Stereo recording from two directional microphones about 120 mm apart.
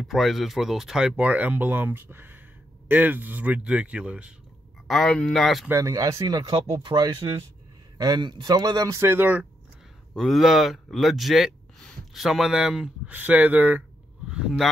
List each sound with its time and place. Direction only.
0.0 s speech: centre (ahead or behind)
4.8 s speech: 5° left (ahead or behind)
5.7 s speech: 25° right (ahead or behind)
10.1 s a man's voice: centre (ahead or behind)